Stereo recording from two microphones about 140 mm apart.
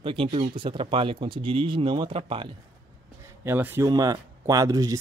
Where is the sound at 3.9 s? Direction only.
25° right (ahead or behind).